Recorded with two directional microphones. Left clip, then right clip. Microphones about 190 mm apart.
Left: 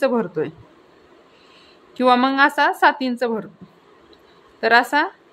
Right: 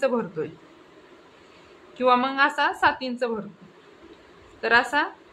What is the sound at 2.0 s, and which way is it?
A woman's voice, 40° left (ahead or behind).